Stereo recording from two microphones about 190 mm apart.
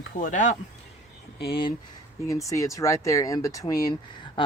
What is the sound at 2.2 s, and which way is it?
Speech, 15° left (ahead or behind).